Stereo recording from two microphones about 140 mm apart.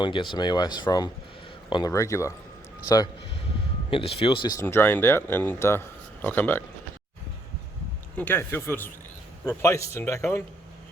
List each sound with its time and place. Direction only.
0.0 s speech: 35° left (ahead or behind)
3.8 s speech: 40° left (ahead or behind)
4.5 s speech: 15° left (ahead or behind)
8.1 s speech: 15° left (ahead or behind)